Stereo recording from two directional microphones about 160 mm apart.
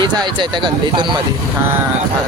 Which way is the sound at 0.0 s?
30° right (ahead or behind).